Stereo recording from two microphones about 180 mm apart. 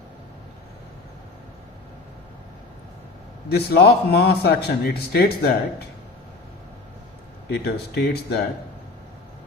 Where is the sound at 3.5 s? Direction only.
60° left (ahead or behind).